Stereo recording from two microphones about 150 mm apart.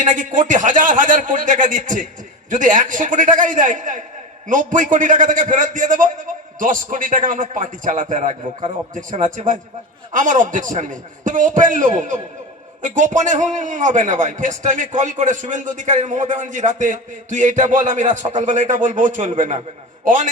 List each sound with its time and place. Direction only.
0.0 s a man's voice: 60° right (ahead or behind)